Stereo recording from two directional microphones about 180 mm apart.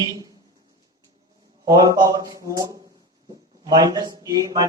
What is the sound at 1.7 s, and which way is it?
Speech, 20° right (ahead or behind).